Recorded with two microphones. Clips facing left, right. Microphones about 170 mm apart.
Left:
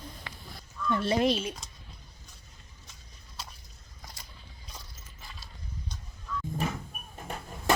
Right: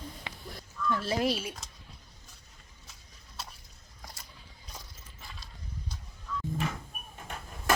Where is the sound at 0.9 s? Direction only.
Centre (ahead or behind).